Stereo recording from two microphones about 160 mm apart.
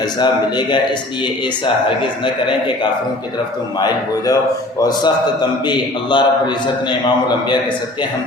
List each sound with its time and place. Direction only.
0.2 s a man's voice: 30° left (ahead or behind)
3.8 s a man's voice: 25° left (ahead or behind)